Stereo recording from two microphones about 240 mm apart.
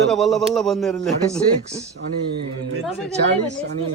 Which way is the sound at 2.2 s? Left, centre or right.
Right.